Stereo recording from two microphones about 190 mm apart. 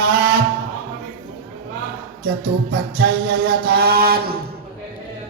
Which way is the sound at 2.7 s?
55° right (ahead or behind).